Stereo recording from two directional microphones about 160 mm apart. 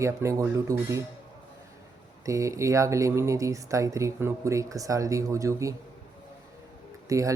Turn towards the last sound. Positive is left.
turn(degrees=-20)  # may be behind; listen again after turning